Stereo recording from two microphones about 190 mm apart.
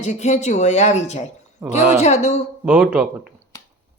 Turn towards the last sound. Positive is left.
turn(degrees=-5)  # may be behind; listen again after turning